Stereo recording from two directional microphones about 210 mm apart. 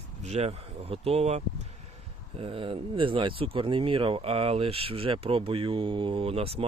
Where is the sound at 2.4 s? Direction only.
25° right (ahead or behind).